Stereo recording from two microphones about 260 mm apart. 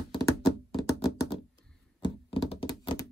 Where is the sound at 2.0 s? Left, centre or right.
Centre.